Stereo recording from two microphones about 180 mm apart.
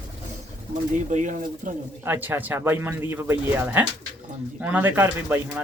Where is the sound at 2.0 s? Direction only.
10° right (ahead or behind).